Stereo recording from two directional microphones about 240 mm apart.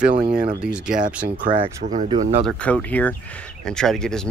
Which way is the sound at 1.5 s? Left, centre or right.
Right.